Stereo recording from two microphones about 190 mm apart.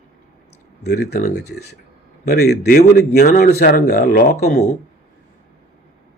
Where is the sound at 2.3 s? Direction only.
55° left (ahead or behind).